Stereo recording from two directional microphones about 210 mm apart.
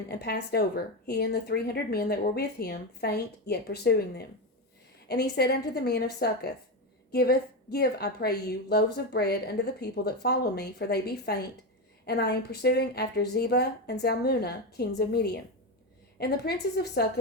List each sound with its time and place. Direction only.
0.1 s a woman's voice: 50° left (ahead or behind)